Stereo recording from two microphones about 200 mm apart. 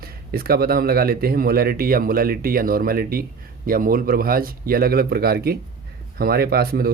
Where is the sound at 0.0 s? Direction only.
50° right (ahead or behind).